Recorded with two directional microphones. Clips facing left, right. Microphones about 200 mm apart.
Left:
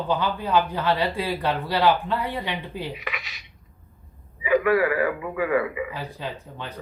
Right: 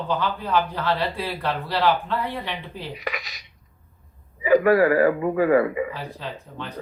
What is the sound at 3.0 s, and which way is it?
Speech, 40° right (ahead or behind).